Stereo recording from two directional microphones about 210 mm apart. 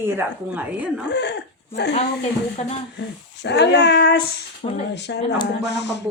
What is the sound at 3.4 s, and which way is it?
Child singing, 55° left (ahead or behind).